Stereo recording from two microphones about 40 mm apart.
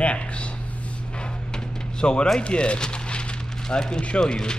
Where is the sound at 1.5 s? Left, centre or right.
Left.